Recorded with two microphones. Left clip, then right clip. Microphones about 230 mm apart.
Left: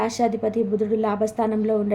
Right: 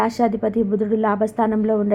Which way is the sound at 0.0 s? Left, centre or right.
Centre.